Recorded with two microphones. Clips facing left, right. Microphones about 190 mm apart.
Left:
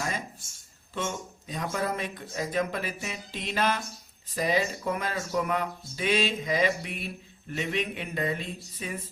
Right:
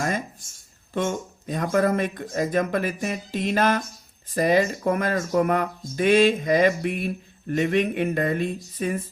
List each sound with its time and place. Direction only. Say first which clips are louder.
1.0 s speech: right 6 dB; 55° right (ahead or behind)